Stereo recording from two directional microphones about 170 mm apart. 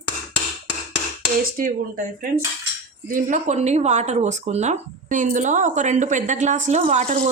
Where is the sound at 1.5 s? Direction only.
55° right (ahead or behind).